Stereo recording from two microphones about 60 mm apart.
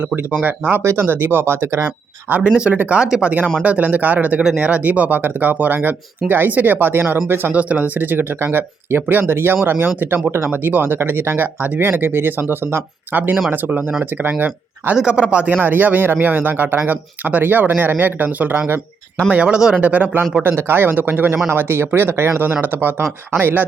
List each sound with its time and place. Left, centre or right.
0.4 s speech: right
0.8 s speech: right
1.0 s speech: right
2.4 s speech: centre; by 7.5 s right
7.5 s speech: right
14.9 s speech: centre
19.3 s speech: centre
19.8 s speech: right
20.4 s speech: right